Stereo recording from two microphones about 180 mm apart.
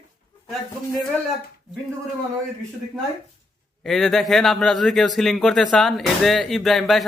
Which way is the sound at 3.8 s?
Centre (ahead or behind).